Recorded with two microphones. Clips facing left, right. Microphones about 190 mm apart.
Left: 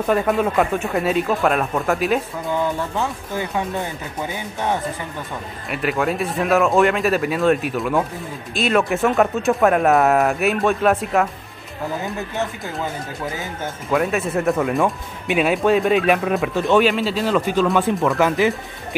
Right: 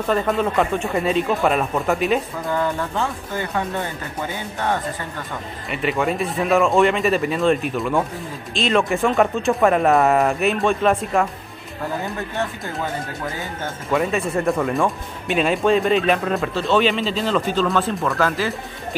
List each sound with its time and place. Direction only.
0.1 s speech: 5° left (ahead or behind)
5.7 s speech: centre (ahead or behind)
13.8 s speech: centre (ahead or behind); by 18.5 s 20° left (ahead or behind)